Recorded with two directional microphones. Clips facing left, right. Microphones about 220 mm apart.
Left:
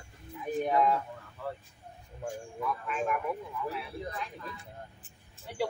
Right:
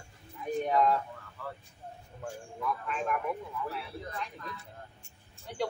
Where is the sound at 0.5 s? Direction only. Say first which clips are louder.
Even; 5° left (ahead or behind).